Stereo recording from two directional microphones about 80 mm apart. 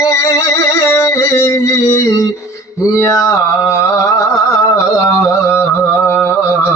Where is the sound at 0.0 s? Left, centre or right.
Left.